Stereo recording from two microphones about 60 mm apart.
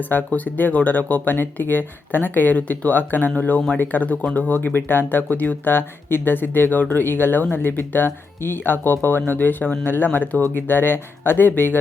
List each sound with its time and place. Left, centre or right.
0.0 s speech: left